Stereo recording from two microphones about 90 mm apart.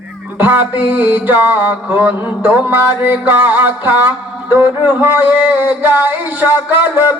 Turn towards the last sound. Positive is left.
turn(degrees=-20)  # may be behind; listen again after turning